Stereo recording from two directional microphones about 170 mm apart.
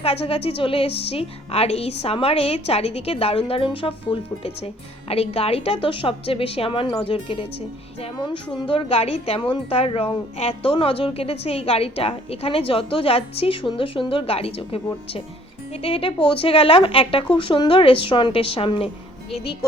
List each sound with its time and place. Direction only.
0.0 s a woman's voice: 35° left (ahead or behind)
8.0 s music: 30° left (ahead or behind)
8.5 s a woman's voice: 30° left (ahead or behind)